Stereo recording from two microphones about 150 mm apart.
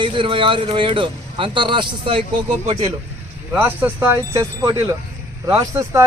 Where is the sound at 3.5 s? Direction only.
10° right (ahead or behind).